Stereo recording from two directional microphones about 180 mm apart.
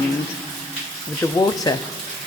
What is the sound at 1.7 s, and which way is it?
Speech, 25° left (ahead or behind).